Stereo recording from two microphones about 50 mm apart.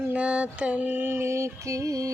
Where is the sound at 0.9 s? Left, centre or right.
Right.